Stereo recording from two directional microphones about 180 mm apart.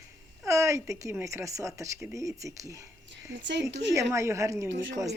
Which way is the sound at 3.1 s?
80° right.